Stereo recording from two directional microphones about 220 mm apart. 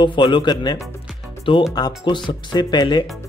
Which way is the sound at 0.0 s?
20° left (ahead or behind).